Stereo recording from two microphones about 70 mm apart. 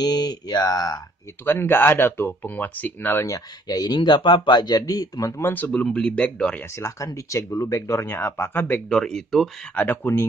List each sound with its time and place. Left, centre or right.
0.0 s speech: left
1.4 s speech: left
3.1 s speech: left
5.4 s speech: left
5.7 s speech: centre
6.6 s speech: left
8.8 s speech: centre
9.8 s speech: left